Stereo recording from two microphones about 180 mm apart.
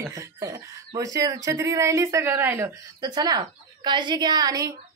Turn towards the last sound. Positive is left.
turn(degrees=-20)  # may be behind; listen again after turning